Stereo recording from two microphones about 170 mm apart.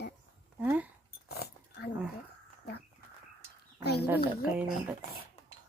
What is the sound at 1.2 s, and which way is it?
Dog, 70° left (ahead or behind).